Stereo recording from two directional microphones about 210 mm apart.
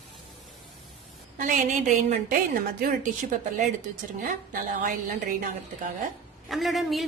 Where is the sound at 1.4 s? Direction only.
35° right (ahead or behind).